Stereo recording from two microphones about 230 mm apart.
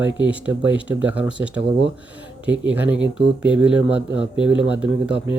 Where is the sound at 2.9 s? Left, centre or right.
Right.